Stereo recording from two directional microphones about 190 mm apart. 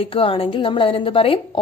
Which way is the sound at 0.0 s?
30° left (ahead or behind).